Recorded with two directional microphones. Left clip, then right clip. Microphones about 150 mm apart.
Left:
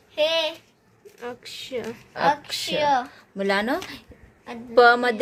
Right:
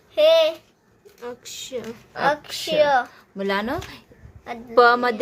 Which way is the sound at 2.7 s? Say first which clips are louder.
Right 4 dB; 80° right.